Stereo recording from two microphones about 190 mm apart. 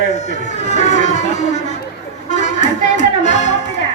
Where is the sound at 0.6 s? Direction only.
35° left (ahead or behind).